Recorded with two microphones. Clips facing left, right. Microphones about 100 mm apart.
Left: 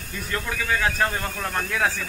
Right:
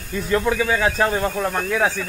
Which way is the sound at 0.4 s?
20° right (ahead or behind).